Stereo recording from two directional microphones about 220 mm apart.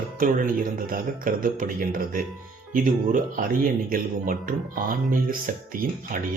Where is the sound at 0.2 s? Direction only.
40° right (ahead or behind).